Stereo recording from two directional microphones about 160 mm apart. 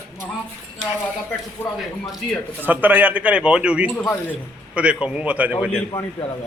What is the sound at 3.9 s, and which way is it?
Speech, 10° left (ahead or behind).